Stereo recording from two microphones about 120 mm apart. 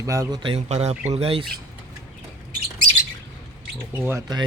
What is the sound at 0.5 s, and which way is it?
Speech, 60° right (ahead or behind).